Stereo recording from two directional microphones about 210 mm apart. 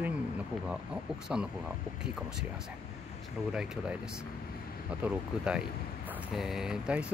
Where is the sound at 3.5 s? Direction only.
5° right (ahead or behind).